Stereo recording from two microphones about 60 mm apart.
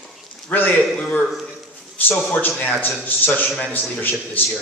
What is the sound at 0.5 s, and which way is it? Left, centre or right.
Speech, left.